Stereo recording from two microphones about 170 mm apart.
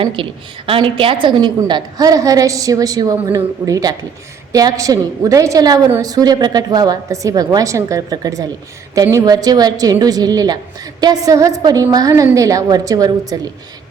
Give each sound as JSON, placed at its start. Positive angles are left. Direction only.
{"t": 0.0, "sound": "a woman's voice", "side_deg": -30}